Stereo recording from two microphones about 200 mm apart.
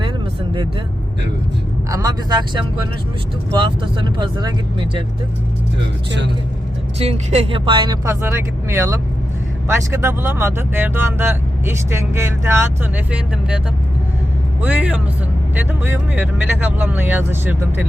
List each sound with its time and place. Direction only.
1.9 s speech: 15° right (ahead or behind)
7.0 s speech: 30° right (ahead or behind); by 13.6 s 5° right (ahead or behind)
14.6 s speech: 5° right (ahead or behind)